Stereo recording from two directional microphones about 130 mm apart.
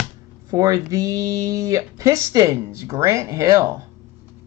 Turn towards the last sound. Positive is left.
turn(degrees=-20)  # may be behind; listen again after turning